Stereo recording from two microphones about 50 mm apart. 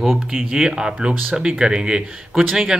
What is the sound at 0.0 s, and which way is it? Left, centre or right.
Speech, centre.